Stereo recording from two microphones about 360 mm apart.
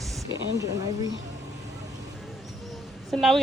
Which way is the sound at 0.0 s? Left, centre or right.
Centre.